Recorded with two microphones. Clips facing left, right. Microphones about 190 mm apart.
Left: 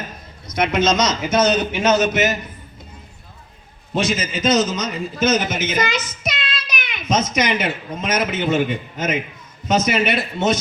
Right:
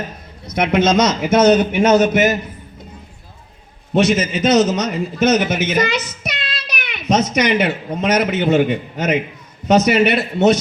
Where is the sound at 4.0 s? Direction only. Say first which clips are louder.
Right 6 dB; 65° right (ahead or behind).